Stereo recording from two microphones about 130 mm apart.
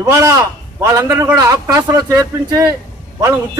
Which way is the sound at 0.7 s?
25° right (ahead or behind).